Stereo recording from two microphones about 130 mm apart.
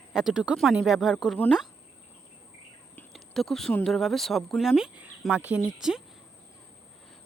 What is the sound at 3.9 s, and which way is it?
Speech, centre (ahead or behind).